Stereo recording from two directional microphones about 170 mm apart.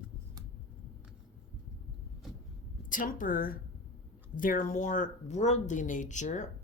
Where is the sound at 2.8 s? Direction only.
50° left (ahead or behind).